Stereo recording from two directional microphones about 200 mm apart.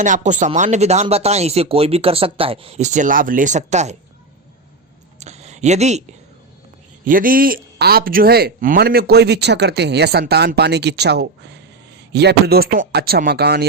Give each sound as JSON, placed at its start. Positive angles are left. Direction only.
{"t": 0.0, "sound": "speech", "side_deg": -40}
{"t": 5.2, "sound": "a sound", "side_deg": -35}
{"t": 7.0, "sound": "a man's voice", "side_deg": -45}